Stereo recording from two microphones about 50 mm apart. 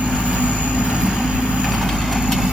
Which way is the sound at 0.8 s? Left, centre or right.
Right.